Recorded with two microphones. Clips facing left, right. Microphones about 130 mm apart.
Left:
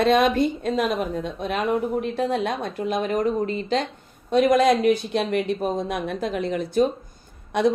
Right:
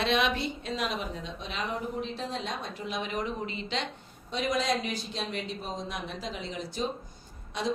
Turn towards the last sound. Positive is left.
turn(degrees=60)  # may be behind; listen again after turning